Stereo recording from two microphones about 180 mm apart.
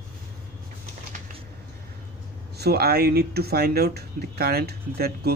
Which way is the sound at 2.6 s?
60° right (ahead or behind).